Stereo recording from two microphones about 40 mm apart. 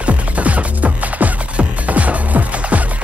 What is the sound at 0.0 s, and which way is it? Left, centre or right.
Music, right.